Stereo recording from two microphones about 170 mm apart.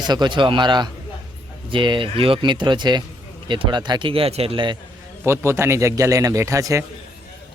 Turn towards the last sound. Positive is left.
turn(degrees=-20)  # may be behind; listen again after turning